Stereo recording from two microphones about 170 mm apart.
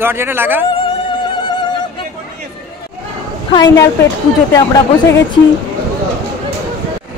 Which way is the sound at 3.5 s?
25° left (ahead or behind).